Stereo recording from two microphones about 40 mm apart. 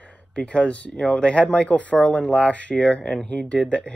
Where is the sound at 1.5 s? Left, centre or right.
Left.